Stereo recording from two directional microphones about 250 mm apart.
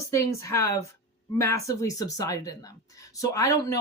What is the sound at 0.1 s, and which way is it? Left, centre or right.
Speech, centre.